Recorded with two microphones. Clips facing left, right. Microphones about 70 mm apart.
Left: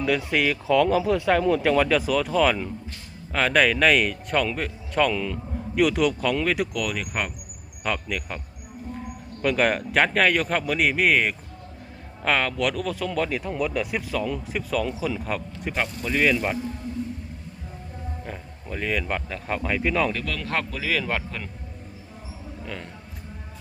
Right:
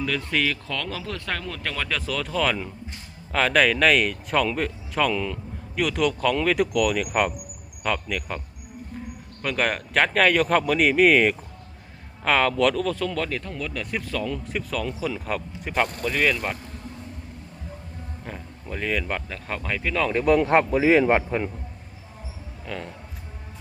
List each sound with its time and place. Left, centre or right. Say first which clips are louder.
0.0 s speech: left 2 dB; centre
9.4 s speech: left 3 dB; centre
18.3 s speech: right 3 dB; centre
20.1 s a man's voice: right 10 dB; right
22.6 s speech: right 3 dB; centre